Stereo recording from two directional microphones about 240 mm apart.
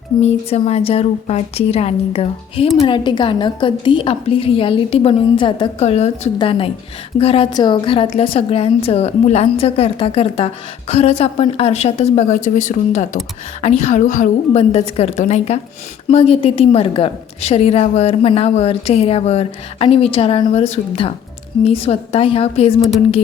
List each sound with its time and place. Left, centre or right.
0.2 s a woman's voice: left